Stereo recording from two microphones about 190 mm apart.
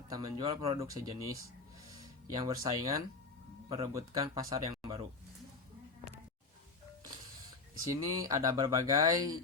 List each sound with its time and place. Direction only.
0.1 s speech: 20° right (ahead or behind)
0.8 s speech: 20° right (ahead or behind)
7.9 s speech: 20° right (ahead or behind)